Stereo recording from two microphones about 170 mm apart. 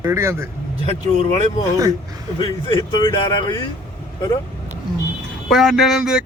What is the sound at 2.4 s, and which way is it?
Speech, 25° left (ahead or behind).